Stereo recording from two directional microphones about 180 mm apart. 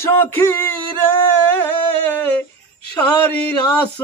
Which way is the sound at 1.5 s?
10° left (ahead or behind).